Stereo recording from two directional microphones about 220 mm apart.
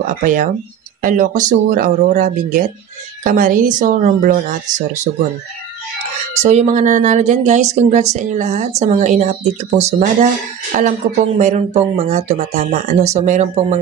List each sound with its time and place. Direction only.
0.2 s speech: 35° right (ahead or behind)
6.3 s speech: 30° right (ahead or behind)